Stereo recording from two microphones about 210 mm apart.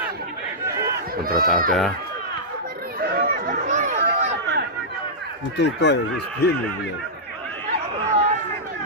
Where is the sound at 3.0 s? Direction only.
45° right (ahead or behind).